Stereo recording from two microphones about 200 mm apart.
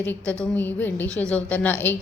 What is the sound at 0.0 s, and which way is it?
A woman's voice, 10° left (ahead or behind).